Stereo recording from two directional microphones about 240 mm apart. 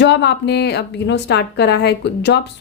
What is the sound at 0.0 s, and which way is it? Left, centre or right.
Speech, left.